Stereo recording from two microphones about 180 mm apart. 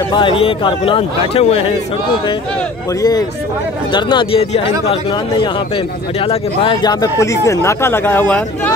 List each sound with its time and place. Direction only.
0.1 s speech: 30° left (ahead or behind)
3.0 s speech: 20° left (ahead or behind)
6.2 s speech: 25° left (ahead or behind); by 8.7 s 10° left (ahead or behind)